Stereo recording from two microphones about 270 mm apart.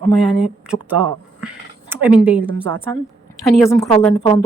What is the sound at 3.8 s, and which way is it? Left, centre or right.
Speech, centre.